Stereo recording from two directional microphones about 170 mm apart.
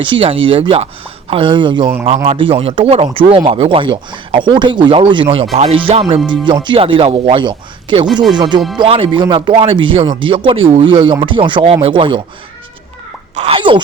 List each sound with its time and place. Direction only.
0.0 s speech: 30° right (ahead or behind)
13.3 s speech: 40° right (ahead or behind)
13.6 s speech: 30° right (ahead or behind)